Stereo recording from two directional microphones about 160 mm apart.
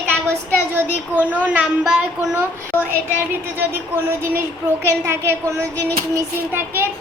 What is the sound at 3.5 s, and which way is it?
Speech, 15° right (ahead or behind).